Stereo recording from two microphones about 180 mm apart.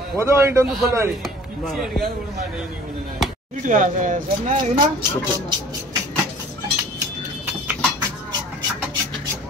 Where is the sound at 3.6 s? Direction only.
45° right (ahead or behind).